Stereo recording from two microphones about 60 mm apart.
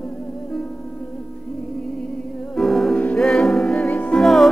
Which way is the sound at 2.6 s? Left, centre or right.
Centre.